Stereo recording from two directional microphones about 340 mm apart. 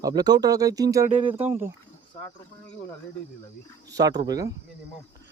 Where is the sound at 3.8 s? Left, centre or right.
Centre.